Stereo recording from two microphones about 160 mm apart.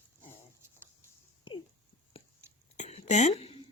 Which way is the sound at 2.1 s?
35° left (ahead or behind).